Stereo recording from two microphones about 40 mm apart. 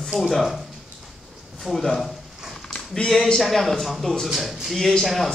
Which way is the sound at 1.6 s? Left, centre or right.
Centre.